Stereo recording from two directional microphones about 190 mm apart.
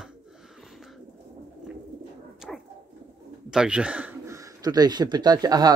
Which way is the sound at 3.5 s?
5° right (ahead or behind).